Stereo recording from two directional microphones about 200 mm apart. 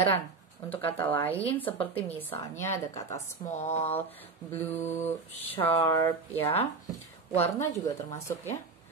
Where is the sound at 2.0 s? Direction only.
10° left (ahead or behind).